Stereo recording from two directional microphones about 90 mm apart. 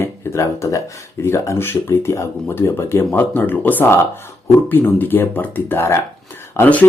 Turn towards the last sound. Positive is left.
turn(degrees=20)  # may be behind; listen again after turning